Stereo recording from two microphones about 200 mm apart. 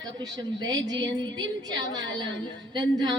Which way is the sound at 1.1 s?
65° right (ahead or behind).